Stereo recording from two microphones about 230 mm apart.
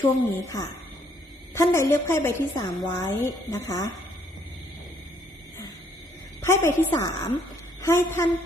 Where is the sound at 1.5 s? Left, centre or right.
Centre.